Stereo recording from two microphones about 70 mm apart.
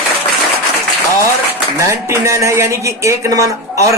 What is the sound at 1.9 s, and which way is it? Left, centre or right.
A man's voice, right.